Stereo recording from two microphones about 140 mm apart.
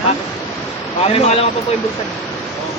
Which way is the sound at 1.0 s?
45° left (ahead or behind).